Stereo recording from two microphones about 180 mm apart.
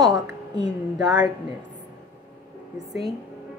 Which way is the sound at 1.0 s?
20° right (ahead or behind).